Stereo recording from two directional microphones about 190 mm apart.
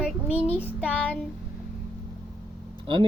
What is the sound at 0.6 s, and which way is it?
Child singing, 5° left (ahead or behind).